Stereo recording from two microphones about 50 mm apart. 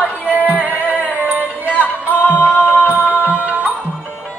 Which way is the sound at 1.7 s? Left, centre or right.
Left.